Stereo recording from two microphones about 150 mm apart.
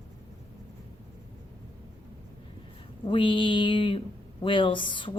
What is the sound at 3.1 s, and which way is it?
Speech, 35° left (ahead or behind).